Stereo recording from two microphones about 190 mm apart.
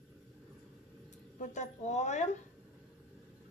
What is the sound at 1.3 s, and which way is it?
A woman's voice, 40° left (ahead or behind).